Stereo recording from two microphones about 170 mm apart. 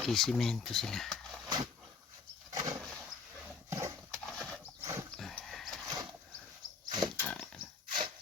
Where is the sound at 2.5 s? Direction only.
20° right (ahead or behind).